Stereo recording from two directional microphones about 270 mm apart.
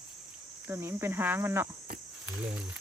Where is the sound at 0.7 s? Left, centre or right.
Centre.